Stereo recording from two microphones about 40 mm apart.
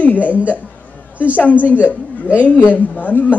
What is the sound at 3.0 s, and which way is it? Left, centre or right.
Speech, left.